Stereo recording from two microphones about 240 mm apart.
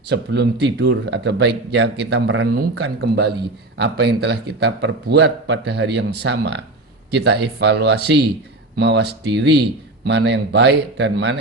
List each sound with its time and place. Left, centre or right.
0.1 s a man's voice: right